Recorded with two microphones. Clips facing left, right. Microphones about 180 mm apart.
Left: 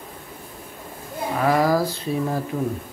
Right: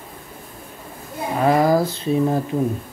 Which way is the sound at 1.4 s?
25° right (ahead or behind).